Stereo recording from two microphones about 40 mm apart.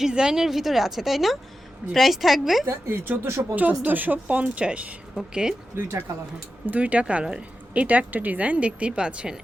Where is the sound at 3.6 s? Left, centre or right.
Right.